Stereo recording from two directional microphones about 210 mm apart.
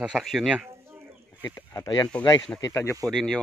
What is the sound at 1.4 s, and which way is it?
Speech, 15° left (ahead or behind).